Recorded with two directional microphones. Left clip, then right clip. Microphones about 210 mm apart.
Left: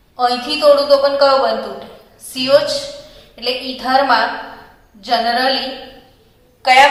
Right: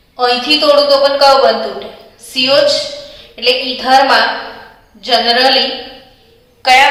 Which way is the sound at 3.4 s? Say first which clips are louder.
Right 7 dB; 20° left (ahead or behind).